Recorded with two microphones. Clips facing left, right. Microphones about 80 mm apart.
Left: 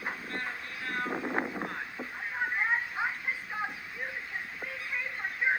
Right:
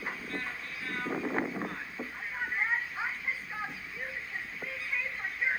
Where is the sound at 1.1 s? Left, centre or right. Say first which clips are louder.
Even; centre.